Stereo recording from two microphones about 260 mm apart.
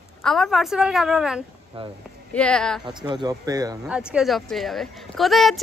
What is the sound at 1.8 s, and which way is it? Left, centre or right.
Speech, right.